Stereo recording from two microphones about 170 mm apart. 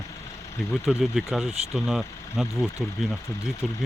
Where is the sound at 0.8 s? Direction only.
Centre (ahead or behind).